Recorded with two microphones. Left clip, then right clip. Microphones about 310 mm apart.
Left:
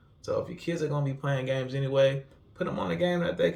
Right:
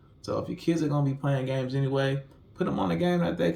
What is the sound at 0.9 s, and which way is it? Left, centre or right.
Speech, centre.